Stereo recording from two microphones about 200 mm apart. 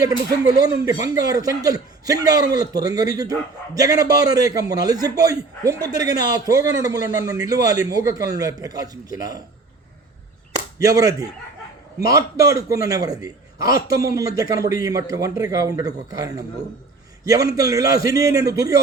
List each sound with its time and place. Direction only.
0.0 s a man's voice: 20° right (ahead or behind)
10.8 s a man's voice: 15° right (ahead or behind)
17.6 s a man's voice: 15° right (ahead or behind)